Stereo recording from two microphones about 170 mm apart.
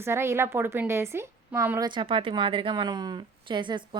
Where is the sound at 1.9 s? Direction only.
30° right (ahead or behind).